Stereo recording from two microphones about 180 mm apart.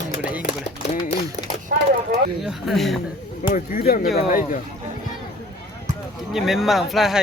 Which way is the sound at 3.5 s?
55° left (ahead or behind).